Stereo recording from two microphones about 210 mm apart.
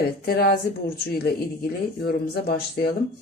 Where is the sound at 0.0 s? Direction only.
45° left (ahead or behind).